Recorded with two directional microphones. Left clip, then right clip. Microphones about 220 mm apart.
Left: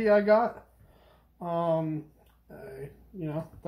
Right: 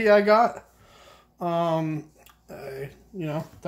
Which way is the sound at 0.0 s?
40° right (ahead or behind).